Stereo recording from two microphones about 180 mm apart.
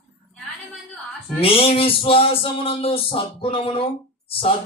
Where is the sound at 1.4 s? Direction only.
30° left (ahead or behind).